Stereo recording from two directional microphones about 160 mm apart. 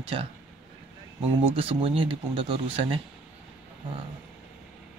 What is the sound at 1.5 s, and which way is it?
Speech, 35° right (ahead or behind).